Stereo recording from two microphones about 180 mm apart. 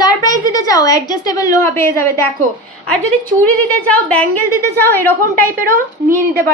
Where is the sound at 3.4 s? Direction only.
10° left (ahead or behind).